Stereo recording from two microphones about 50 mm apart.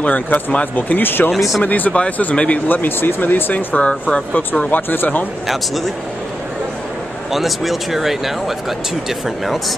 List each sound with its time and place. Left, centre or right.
0.0 s speech: left
1.3 s speech: centre
1.6 s speech: left
2.7 s speech: left
7.3 s speech: centre